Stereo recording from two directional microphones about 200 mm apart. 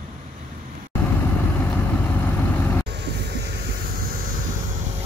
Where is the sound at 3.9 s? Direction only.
45° right (ahead or behind).